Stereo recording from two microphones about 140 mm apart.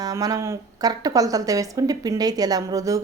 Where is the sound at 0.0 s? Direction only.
25° right (ahead or behind).